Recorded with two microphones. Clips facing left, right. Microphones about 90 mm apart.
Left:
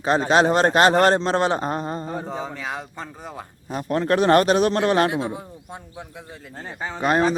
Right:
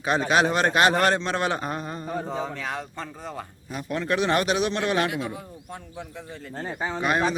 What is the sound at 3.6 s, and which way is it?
A man's voice, 40° left (ahead or behind).